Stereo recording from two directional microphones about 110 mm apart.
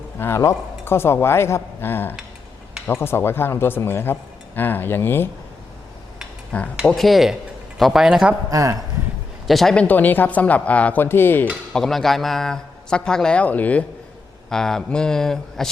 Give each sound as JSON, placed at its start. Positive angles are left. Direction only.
{"t": 0.2, "sound": "speech", "side_deg": 25}
{"t": 6.5, "sound": "a man's voice", "side_deg": 15}
{"t": 6.8, "sound": "speech", "side_deg": 0}
{"t": 8.4, "sound": "a man's voice", "side_deg": -30}
{"t": 9.5, "sound": "speech", "side_deg": 0}
{"t": 9.8, "sound": "a man's voice", "side_deg": 15}
{"t": 11.7, "sound": "a man's voice", "side_deg": 5}